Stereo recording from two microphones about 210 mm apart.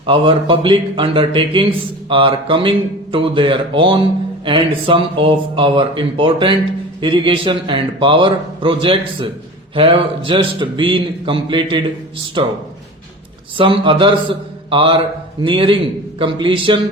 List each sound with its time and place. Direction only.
0.0 s a man's voice: 25° right (ahead or behind)
13.6 s a man's voice: 25° right (ahead or behind)